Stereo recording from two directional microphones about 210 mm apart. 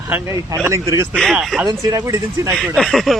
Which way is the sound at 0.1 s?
10° right (ahead or behind).